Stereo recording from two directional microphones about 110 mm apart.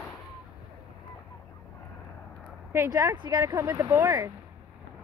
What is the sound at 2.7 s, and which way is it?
Speech, 25° right (ahead or behind).